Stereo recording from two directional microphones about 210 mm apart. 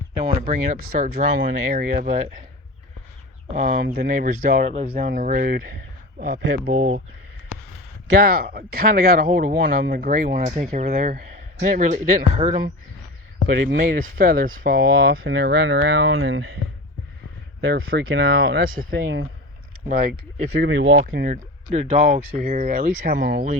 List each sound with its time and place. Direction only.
0.3 s speech: 40° right (ahead or behind)
3.5 s speech: 40° right (ahead or behind)
8.2 s speech: 45° right (ahead or behind)
13.6 s speech: 55° right (ahead or behind)
17.6 s speech: 50° right (ahead or behind)
21.1 s speech: 40° right (ahead or behind)